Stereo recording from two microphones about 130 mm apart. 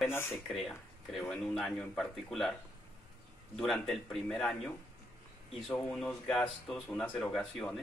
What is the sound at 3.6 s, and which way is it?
Speech, 5° left (ahead or behind).